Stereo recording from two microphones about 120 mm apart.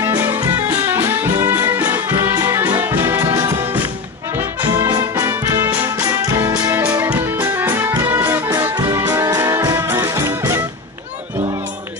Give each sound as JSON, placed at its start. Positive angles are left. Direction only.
{"t": 0.2, "sound": "music", "side_deg": -15}
{"t": 4.8, "sound": "music", "side_deg": -30}
{"t": 5.3, "sound": "music", "side_deg": -20}
{"t": 5.9, "sound": "music", "side_deg": -25}
{"t": 6.7, "sound": "music", "side_deg": -15}